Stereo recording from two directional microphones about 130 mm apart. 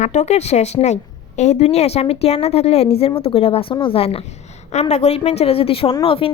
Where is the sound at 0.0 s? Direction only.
65° left (ahead or behind); by 4.1 s 45° left (ahead or behind).